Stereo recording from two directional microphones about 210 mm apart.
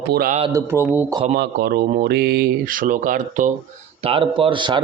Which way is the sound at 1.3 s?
50° right (ahead or behind).